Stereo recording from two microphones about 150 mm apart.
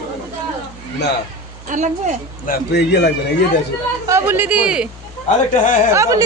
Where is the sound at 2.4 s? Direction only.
80° left.